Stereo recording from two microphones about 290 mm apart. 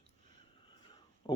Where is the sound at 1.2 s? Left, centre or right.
Centre.